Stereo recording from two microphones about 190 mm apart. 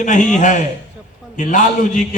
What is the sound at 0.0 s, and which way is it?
A man's voice, 40° left (ahead or behind).